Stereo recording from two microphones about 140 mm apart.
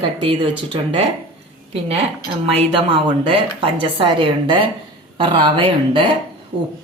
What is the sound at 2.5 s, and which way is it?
Speech, 45° right (ahead or behind).